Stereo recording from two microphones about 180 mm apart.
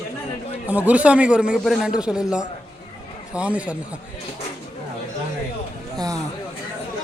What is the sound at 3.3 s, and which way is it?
Speech, 5° right (ahead or behind).